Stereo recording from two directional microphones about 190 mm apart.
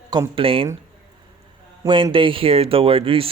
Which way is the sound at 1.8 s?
20° right (ahead or behind).